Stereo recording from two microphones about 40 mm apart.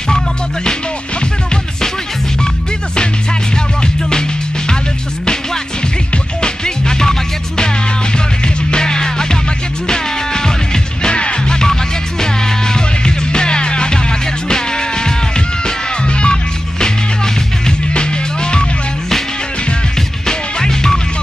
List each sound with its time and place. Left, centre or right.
6.4 s music: centre
8.7 s music: centre
17.6 s music: left
20.2 s music: centre